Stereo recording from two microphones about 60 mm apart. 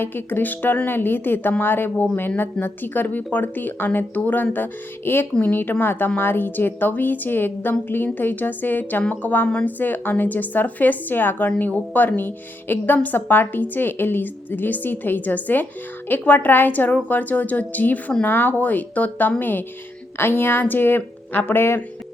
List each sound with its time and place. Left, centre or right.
0.0 s a woman's voice: left